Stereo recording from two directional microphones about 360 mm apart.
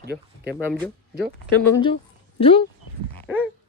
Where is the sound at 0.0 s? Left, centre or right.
Right.